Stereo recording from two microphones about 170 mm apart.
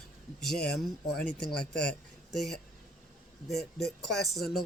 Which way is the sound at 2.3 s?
Centre (ahead or behind).